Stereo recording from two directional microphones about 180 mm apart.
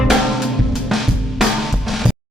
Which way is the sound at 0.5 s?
Centre (ahead or behind).